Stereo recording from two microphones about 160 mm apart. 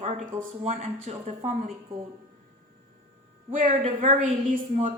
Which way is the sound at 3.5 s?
55° right (ahead or behind).